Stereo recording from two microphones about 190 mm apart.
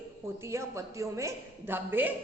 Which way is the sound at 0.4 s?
15° right (ahead or behind).